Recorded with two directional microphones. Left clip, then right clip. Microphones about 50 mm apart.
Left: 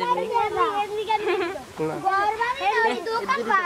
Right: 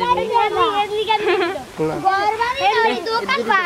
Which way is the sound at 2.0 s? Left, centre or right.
Right.